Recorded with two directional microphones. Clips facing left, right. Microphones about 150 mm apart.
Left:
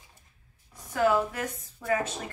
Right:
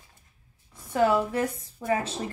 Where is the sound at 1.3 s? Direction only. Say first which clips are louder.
Right 7 dB; 30° right (ahead or behind).